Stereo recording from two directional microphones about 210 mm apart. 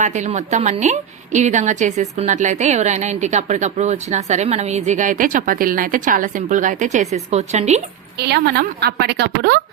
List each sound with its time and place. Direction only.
0.0 s a woman's voice: 35° right (ahead or behind)
8.2 s a woman's voice: 50° right (ahead or behind)